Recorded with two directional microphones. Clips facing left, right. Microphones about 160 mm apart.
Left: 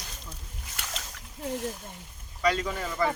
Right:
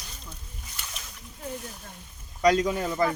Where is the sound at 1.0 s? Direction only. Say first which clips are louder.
Left 3 dB; 90° left.